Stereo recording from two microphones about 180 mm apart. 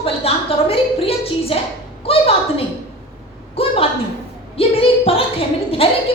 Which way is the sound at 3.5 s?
30° left (ahead or behind).